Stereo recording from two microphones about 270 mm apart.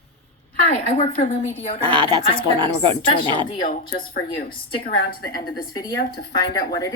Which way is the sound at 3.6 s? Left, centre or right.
Left.